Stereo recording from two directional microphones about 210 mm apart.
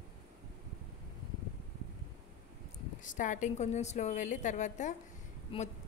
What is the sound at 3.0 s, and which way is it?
A woman's voice, 35° left (ahead or behind).